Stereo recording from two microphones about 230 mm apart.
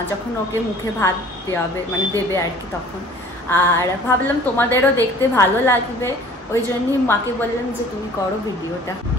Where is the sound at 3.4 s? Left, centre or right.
Centre.